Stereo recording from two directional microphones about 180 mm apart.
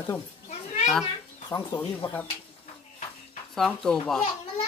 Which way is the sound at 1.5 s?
10° left (ahead or behind).